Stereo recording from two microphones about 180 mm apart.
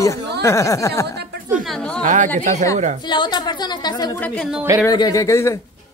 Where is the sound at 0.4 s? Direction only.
15° left (ahead or behind).